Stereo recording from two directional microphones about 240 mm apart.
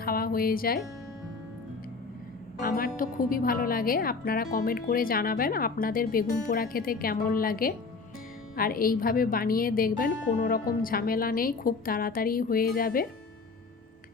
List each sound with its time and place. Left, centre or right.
0.0 s speech: left
2.6 s a woman's voice: left